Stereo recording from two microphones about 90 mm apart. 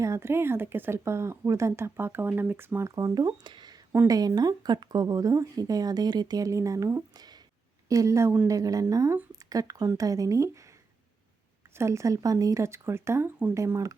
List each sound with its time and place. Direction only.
0.0 s speech: 30° right (ahead or behind)
2.8 s speech: 40° right (ahead or behind)
3.9 s speech: 40° right (ahead or behind)
11.8 s speech: 35° right (ahead or behind)